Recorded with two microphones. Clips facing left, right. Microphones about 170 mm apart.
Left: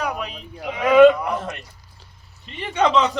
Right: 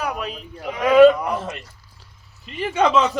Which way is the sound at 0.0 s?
Centre (ahead or behind).